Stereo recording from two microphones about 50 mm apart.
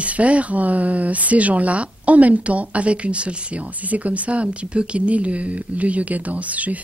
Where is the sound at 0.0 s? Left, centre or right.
Right.